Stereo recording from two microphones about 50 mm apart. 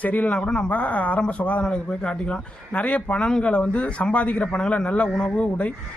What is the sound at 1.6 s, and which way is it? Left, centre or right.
A man's voice, centre.